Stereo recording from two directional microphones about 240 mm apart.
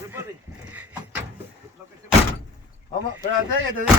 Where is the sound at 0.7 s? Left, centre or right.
Centre.